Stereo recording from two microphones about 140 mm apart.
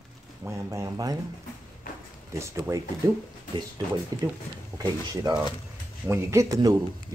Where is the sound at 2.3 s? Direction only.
20° right (ahead or behind).